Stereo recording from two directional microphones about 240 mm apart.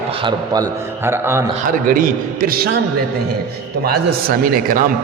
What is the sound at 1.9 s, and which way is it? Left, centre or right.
Speech, right.